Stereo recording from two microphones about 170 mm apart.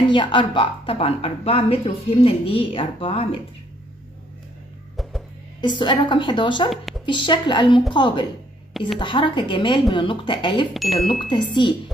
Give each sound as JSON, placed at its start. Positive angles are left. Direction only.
{"t": 0.1, "sound": "a woman's voice", "side_deg": 30}
{"t": 5.6, "sound": "a woman's voice", "side_deg": 30}
{"t": 10.7, "sound": "speech", "side_deg": 0}
{"t": 11.2, "sound": "a woman's voice", "side_deg": 25}